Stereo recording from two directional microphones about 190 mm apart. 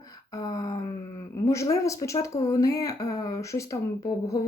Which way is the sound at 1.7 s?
15° left (ahead or behind).